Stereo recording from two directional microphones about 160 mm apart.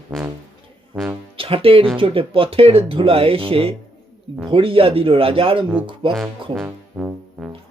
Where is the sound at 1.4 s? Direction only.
35° right (ahead or behind).